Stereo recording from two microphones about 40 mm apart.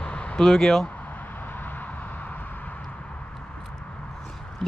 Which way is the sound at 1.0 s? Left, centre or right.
Left.